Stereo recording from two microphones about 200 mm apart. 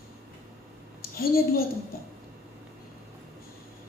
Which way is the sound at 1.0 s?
50° left (ahead or behind).